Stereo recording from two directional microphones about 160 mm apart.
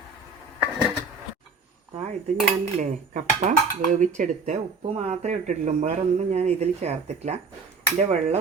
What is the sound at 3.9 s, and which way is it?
Speech, 50° right (ahead or behind).